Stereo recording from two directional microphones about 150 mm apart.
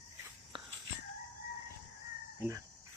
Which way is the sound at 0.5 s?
30° right (ahead or behind).